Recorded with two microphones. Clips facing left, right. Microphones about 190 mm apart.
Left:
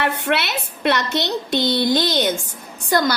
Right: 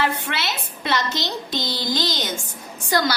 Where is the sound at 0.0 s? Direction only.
65° left (ahead or behind).